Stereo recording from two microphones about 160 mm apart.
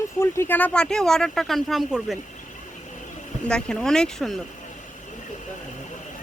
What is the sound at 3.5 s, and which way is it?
Speech, 5° left (ahead or behind).